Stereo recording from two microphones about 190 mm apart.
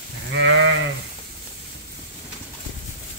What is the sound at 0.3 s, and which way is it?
Sheep, 70° right (ahead or behind).